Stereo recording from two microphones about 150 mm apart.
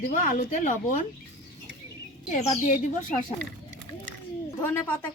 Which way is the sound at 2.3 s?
60° left (ahead or behind).